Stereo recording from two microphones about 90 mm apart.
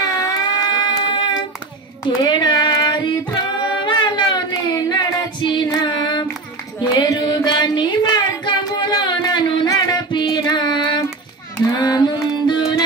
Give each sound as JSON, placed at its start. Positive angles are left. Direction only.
{"t": 0.0, "sound": "a sound", "side_deg": 40}
{"t": 1.0, "sound": "child singing", "side_deg": 60}
{"t": 4.8, "sound": "female singing", "side_deg": 50}
{"t": 5.8, "sound": "a sound", "side_deg": 55}
{"t": 9.7, "sound": "music", "side_deg": 50}
{"t": 11.5, "sound": "music", "side_deg": 45}